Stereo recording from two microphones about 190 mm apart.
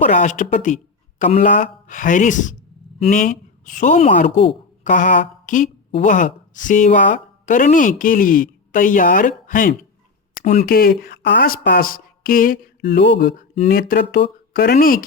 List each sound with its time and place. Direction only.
0.0 s a woman's voice: 40° left (ahead or behind)